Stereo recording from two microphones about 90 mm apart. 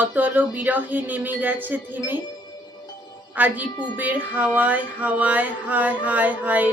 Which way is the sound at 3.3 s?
20° right (ahead or behind).